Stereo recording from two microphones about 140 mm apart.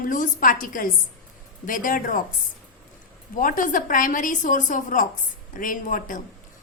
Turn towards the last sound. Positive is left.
turn(degrees=70)  # may be behind; listen again after turning